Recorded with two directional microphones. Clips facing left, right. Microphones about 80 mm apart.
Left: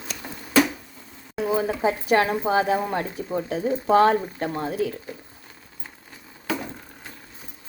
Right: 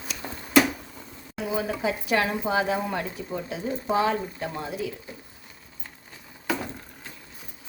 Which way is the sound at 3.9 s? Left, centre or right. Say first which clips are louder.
Left 7 dB; left.